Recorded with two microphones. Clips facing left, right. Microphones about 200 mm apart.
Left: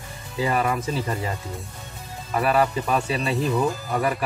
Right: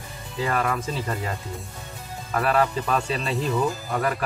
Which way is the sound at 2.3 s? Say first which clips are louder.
Left 1 dB; 10° left (ahead or behind).